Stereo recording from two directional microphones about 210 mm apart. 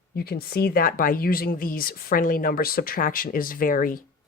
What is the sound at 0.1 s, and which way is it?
Speech, 50° left (ahead or behind).